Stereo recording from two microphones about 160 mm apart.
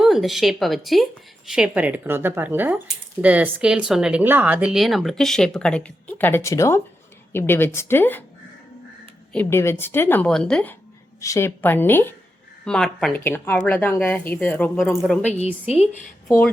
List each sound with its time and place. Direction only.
0.0 s speech: centre (ahead or behind)
9.3 s speech: 10° left (ahead or behind)
11.2 s speech: 20° left (ahead or behind); by 15.2 s 5° left (ahead or behind)
15.2 s a woman's voice: 45° left (ahead or behind)